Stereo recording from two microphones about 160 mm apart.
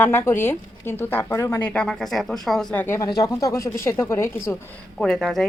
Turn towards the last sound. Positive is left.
turn(degrees=0)  # may be behind; listen again after turning